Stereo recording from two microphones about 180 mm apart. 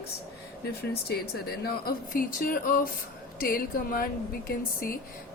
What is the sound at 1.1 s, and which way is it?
Speech, 60° left (ahead or behind).